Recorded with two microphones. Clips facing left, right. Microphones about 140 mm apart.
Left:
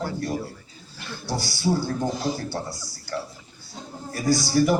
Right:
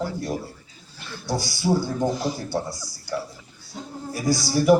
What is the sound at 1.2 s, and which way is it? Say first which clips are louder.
A man's voice: right 1 dB; 15° right (ahead or behind).